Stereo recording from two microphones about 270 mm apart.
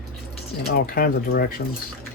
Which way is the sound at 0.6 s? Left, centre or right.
Left.